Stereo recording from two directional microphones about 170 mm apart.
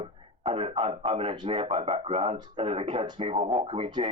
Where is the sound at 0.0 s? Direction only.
35° right (ahead or behind).